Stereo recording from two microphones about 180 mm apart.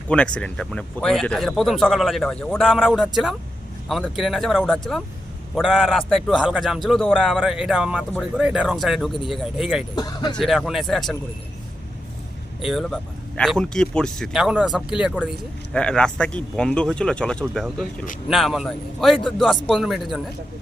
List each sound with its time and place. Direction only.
0.1 s speech: 5° left (ahead or behind)
9.9 s speech: 20° left (ahead or behind)
10.3 s speech: centre (ahead or behind)
12.6 s speech: centre (ahead or behind)
15.7 s speech: 5° left (ahead or behind)